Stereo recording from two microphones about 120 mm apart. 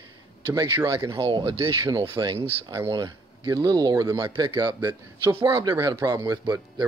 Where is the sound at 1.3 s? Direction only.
45° right (ahead or behind).